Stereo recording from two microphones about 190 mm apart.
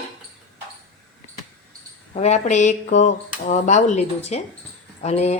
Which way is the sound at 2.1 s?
35° left (ahead or behind).